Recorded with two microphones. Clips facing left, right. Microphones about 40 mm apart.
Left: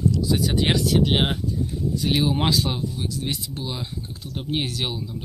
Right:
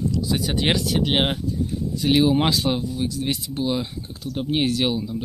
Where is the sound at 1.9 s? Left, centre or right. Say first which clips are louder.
Right 5 dB; right.